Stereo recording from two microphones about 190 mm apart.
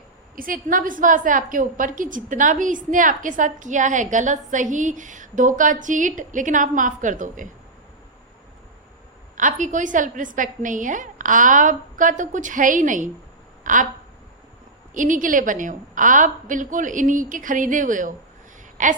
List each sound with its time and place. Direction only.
0.3 s a woman's voice: 50° right (ahead or behind)
9.4 s a woman's voice: 40° right (ahead or behind)
14.9 s a woman's voice: 45° right (ahead or behind)